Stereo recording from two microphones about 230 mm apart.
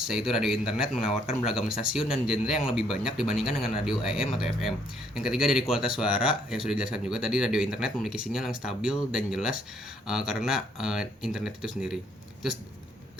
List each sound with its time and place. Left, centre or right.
0.1 s speech: centre